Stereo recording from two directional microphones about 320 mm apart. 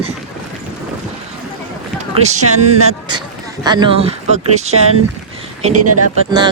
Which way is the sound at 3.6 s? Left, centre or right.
Centre.